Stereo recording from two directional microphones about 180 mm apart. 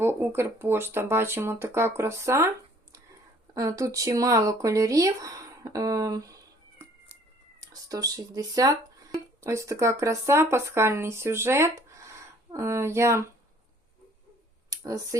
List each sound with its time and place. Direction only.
0.0 s speech: 15° right (ahead or behind)
3.5 s speech: 20° right (ahead or behind)
14.7 s speech: 20° right (ahead or behind)